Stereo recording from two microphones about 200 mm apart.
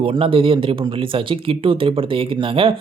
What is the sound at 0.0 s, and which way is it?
Speech, 25° right (ahead or behind).